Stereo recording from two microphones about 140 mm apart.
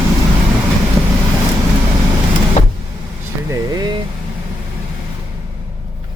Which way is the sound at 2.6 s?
50° left (ahead or behind).